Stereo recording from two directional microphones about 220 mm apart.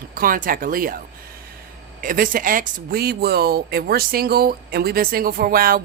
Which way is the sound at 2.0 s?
40° right (ahead or behind).